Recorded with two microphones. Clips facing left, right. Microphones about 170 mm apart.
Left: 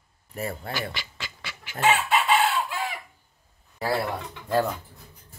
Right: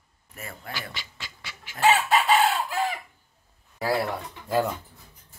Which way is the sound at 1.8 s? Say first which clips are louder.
Right 2 dB; 40° right (ahead or behind).